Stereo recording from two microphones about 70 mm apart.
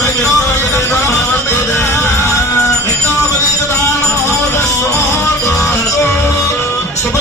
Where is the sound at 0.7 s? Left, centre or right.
Left.